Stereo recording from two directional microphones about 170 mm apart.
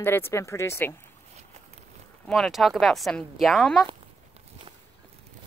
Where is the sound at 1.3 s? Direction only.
40° right (ahead or behind).